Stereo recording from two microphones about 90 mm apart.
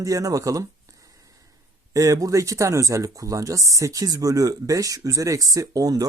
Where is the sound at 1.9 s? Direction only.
40° right (ahead or behind).